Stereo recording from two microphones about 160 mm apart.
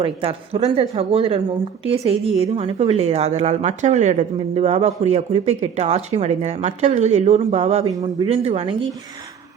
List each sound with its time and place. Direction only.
0.0 s a woman's voice: 35° right (ahead or behind)
7.9 s speech: 25° right (ahead or behind)
8.3 s speech: 40° right (ahead or behind)